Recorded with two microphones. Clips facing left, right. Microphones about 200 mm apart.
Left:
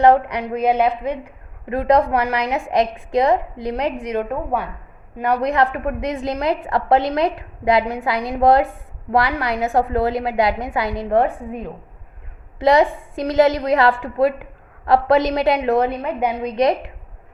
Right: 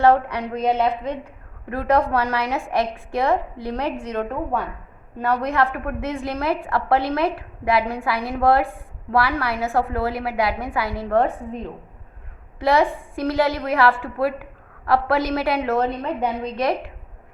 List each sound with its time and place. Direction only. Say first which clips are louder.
0.0 s a woman's voice: left 3 dB; 15° left (ahead or behind)